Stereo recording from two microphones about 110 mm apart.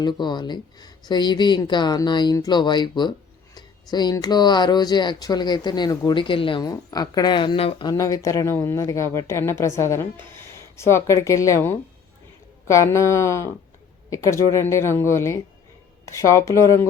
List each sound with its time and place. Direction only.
0.0 s speech: 40° left (ahead or behind)
6.6 s speech: 35° left (ahead or behind); by 7.9 s 60° left (ahead or behind)
7.9 s speech: 30° left (ahead or behind)